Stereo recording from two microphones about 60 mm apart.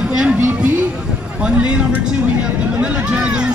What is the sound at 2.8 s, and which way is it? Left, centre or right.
Speech, centre.